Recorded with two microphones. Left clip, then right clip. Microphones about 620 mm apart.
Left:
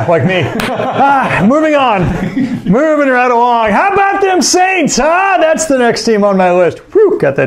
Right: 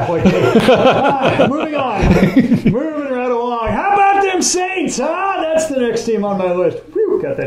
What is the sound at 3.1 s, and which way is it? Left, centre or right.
A man's voice, left.